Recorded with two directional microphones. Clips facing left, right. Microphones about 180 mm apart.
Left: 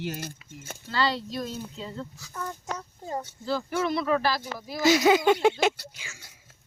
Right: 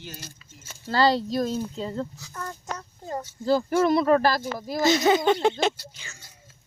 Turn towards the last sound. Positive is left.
turn(degrees=10)  # may be behind; listen again after turning